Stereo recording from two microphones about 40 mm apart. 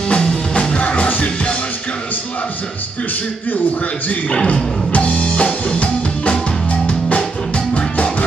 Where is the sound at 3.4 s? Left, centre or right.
Left.